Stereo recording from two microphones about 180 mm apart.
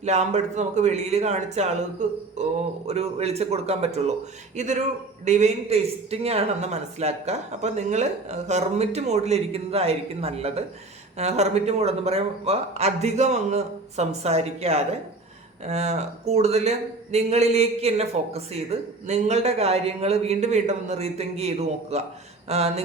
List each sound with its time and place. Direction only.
0.0 s a man's voice: 40° right (ahead or behind)